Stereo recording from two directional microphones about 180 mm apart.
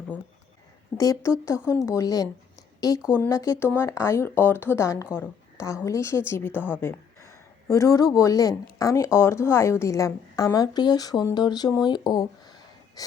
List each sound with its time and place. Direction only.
0.9 s a woman's voice: 20° left (ahead or behind)
6.7 s a sound: 15° left (ahead or behind)
8.1 s a woman's voice: 20° left (ahead or behind)